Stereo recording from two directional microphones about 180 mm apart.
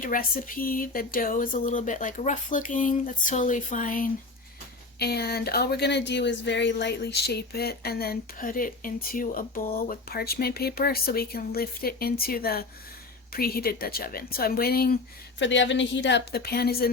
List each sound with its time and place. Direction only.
0.0 s speech: 50° left (ahead or behind)
4.9 s speech: 60° left (ahead or behind)
15.4 s a woman's voice: 90° left; by 16.9 s 60° left (ahead or behind)